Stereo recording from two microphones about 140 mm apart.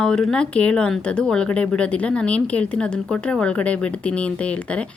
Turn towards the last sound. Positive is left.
turn(degrees=10)  # may be behind; listen again after turning